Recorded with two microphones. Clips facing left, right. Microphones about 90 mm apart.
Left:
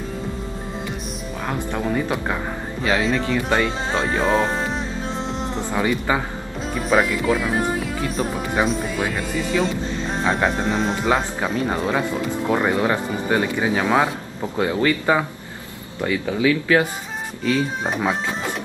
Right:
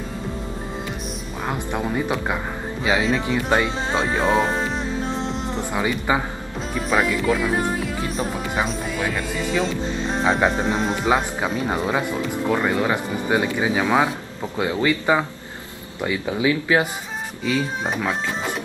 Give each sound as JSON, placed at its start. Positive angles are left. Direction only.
{"t": 1.5, "sound": "speech", "side_deg": -15}
{"t": 2.8, "sound": "speech", "side_deg": -5}
{"t": 3.3, "sound": "speech", "side_deg": -15}
{"t": 5.7, "sound": "speech", "side_deg": -10}
{"t": 6.7, "sound": "speech", "side_deg": 0}
{"t": 10.2, "sound": "speech", "side_deg": -5}
{"t": 12.4, "sound": "speech", "side_deg": 10}
{"t": 12.9, "sound": "speech", "side_deg": -10}
{"t": 13.8, "sound": "speech", "side_deg": 0}
{"t": 16.0, "sound": "speech", "side_deg": -20}